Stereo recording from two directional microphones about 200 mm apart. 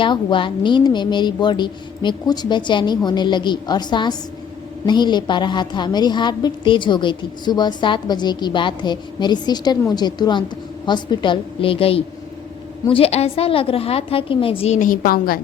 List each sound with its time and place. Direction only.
0.0 s a woman's voice: 25° left (ahead or behind); by 15.4 s 45° left (ahead or behind)